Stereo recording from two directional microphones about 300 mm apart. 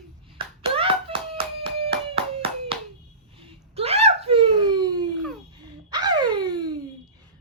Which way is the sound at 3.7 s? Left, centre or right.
Centre.